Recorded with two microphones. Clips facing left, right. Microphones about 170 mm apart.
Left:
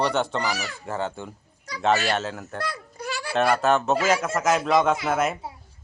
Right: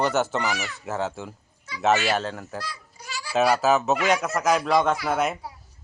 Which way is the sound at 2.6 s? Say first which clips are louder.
Left 8 dB; 60° left (ahead or behind).